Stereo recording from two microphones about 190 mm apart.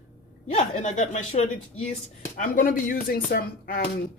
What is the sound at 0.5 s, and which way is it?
Speech, 40° left (ahead or behind).